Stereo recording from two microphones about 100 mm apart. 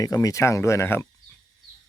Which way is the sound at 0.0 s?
35° left (ahead or behind).